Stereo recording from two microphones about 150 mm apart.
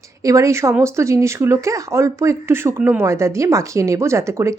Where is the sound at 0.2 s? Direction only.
20° right (ahead or behind).